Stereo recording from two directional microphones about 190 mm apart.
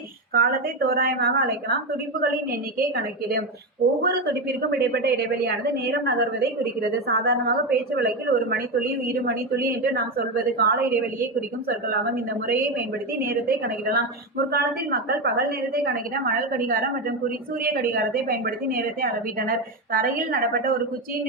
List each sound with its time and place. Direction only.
0.3 s a woman's voice: 50° right (ahead or behind)
11.9 s a woman's voice: 55° right (ahead or behind)